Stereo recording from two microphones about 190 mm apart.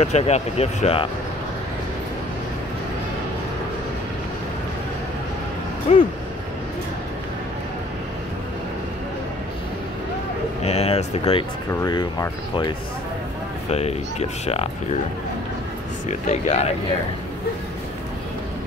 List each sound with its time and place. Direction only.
0.0 s speech: 35° left (ahead or behind)
5.9 s speech: 35° left (ahead or behind)
10.6 s a sound: 35° left (ahead or behind)
11.8 s speech: 20° left (ahead or behind)
13.7 s speech: 35° left (ahead or behind)
16.1 s speech: 35° left (ahead or behind)